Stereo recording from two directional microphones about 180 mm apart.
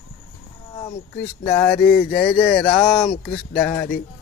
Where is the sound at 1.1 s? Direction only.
10° left (ahead or behind).